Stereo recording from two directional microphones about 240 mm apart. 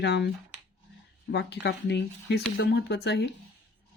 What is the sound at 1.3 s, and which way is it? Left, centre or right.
Speech, left.